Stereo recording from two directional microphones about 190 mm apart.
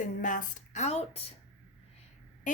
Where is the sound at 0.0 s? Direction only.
45° left (ahead or behind).